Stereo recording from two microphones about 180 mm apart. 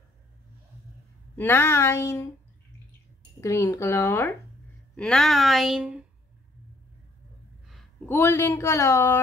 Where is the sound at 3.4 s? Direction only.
15° left (ahead or behind); by 6.0 s 5° right (ahead or behind).